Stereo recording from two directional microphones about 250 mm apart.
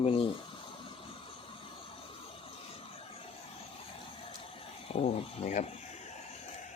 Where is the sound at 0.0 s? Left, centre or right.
Left.